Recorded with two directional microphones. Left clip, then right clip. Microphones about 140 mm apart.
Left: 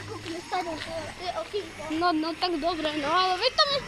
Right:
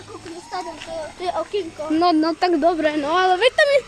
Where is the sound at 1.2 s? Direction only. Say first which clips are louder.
Right 10 dB; 35° right (ahead or behind); by 2.7 s 55° right (ahead or behind).